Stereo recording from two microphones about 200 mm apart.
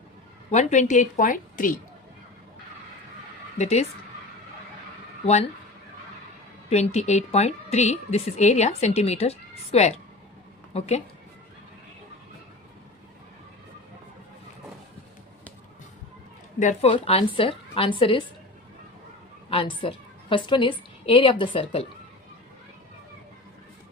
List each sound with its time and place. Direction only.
0.5 s a woman's voice: 35° left (ahead or behind)
3.6 s a woman's voice: 30° left (ahead or behind)
5.2 s speech: 35° left (ahead or behind)
6.9 s a woman's voice: 35° left (ahead or behind)
16.6 s a woman's voice: 35° left (ahead or behind)
19.5 s a woman's voice: 25° left (ahead or behind)